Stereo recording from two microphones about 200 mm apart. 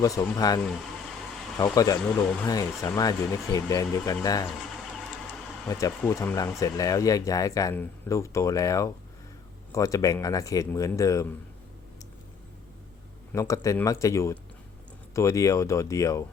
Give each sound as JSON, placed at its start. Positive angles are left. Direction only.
{"t": 0.0, "sound": "speech", "side_deg": 15}
{"t": 5.6, "sound": "speech", "side_deg": 15}
{"t": 13.3, "sound": "speech", "side_deg": 15}